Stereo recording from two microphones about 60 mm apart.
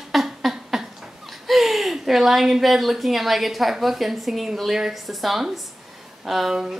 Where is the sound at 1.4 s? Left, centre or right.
Centre.